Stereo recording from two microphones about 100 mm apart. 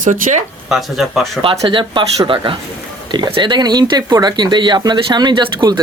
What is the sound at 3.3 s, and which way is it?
Speech, 50° right (ahead or behind).